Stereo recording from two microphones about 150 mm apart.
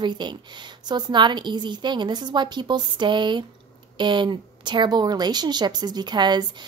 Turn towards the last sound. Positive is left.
turn(degrees=-30)  # may be behind; listen again after turning